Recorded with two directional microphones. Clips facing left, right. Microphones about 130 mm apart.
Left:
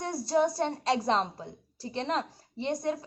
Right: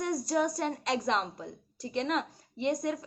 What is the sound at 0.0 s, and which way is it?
A woman's voice, 30° left (ahead or behind).